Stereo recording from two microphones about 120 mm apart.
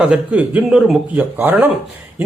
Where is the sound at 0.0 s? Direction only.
10° right (ahead or behind).